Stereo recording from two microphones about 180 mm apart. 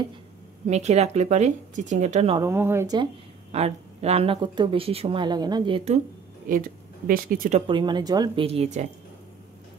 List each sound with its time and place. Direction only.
0.7 s speech: 40° right (ahead or behind)
2.3 s speech: 15° right (ahead or behind)
3.5 s speech: 35° right (ahead or behind)
6.5 s speech: 50° right (ahead or behind)
7.5 s speech: 25° right (ahead or behind)